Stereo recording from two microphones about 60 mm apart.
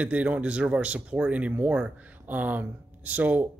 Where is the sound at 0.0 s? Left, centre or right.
Right.